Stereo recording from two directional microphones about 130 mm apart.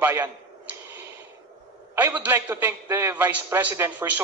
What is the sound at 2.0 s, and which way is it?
A man's voice, 15° right (ahead or behind).